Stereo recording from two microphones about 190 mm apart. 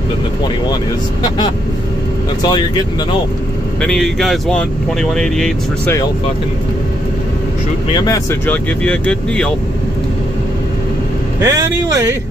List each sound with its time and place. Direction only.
3.8 s speech: centre (ahead or behind)
7.9 s speech: 20° left (ahead or behind)
11.4 s speech: 15° right (ahead or behind)